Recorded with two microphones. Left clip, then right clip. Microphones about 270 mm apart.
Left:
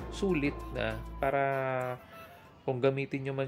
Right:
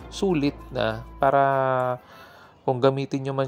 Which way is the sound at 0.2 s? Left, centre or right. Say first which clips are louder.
Right 7 dB; right.